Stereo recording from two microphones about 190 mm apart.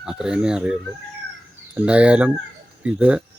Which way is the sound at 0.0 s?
5° right (ahead or behind).